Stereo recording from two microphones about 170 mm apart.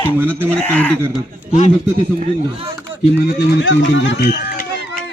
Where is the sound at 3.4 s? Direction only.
90° left.